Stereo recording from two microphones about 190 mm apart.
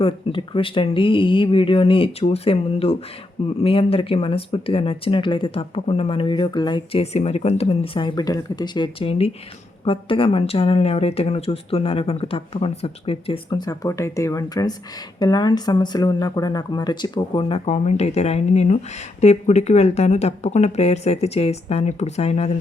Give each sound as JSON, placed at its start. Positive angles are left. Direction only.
{"t": 0.0, "sound": "speech", "side_deg": 25}